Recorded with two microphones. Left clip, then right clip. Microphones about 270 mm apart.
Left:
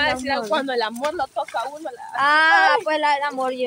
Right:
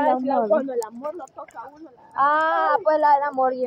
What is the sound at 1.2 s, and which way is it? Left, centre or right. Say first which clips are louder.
Speech: left 12 dB; left.